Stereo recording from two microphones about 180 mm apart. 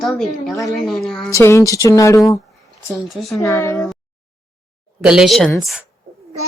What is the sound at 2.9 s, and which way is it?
Speech, centre (ahead or behind).